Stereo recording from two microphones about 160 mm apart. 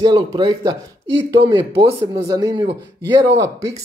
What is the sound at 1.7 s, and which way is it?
Speech, 35° right (ahead or behind).